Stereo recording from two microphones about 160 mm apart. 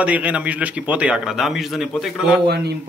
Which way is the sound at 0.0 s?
10° right (ahead or behind).